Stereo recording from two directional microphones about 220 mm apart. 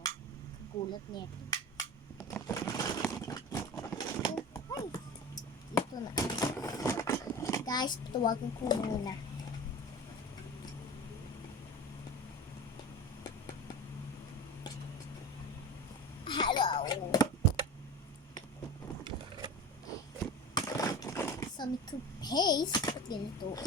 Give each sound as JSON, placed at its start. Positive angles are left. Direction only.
{"t": 0.8, "sound": "cap gun", "side_deg": 20}
{"t": 2.3, "sound": "a sound", "side_deg": 15}
{"t": 4.4, "sound": "chop", "side_deg": 15}
{"t": 13.2, "sound": "vehicle", "side_deg": 15}
{"t": 16.2, "sound": "wail", "side_deg": 20}
{"t": 20.5, "sound": "skateboard", "side_deg": 15}